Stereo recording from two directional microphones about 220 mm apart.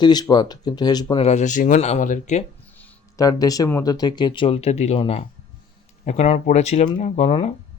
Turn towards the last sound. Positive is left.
turn(degrees=25)  # may be behind; listen again after turning